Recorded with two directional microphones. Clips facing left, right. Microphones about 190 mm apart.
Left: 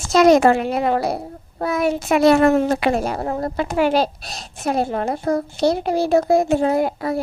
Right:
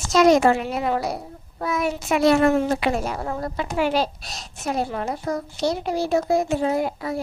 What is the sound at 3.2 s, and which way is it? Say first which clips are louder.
A woman's voice: left 5 dB; 40° left (ahead or behind).